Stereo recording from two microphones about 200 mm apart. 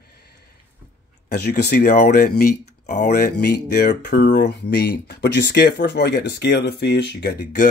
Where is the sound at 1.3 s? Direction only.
55° left (ahead or behind).